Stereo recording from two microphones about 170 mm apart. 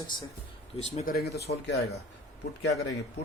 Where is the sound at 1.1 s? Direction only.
70° left (ahead or behind).